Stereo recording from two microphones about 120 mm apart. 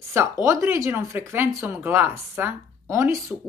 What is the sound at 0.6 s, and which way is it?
Speech, 20° right (ahead or behind).